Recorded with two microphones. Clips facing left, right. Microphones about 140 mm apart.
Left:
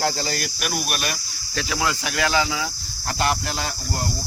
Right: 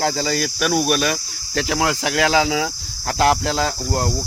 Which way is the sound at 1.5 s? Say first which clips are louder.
Right 5 dB; 70° right (ahead or behind).